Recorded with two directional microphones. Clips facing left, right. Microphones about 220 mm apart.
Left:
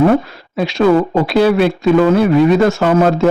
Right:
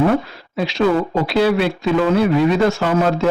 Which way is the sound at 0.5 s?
50° left (ahead or behind).